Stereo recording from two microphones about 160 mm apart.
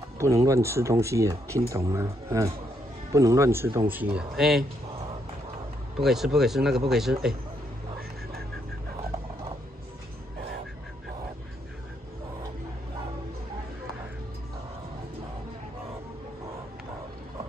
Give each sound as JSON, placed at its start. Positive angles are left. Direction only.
{"t": 0.2, "sound": "speech", "side_deg": -20}
{"t": 5.9, "sound": "speech", "side_deg": 0}